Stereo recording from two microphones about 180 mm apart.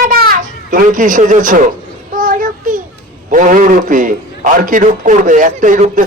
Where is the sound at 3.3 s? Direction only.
45° right (ahead or behind).